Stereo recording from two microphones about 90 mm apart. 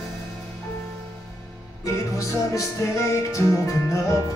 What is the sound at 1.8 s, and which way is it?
Music, 35° left (ahead or behind).